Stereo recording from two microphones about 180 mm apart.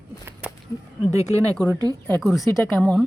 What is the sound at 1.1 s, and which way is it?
Speech, 15° right (ahead or behind).